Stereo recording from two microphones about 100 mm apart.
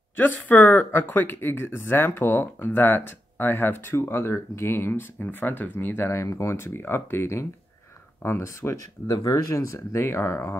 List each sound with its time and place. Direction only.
0.2 s speech: 20° left (ahead or behind)